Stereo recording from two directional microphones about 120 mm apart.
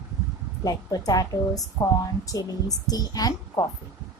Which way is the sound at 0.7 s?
30° left (ahead or behind).